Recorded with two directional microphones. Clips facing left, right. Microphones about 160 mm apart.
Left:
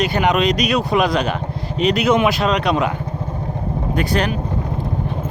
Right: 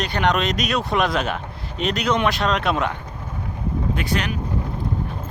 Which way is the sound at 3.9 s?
40° left (ahead or behind).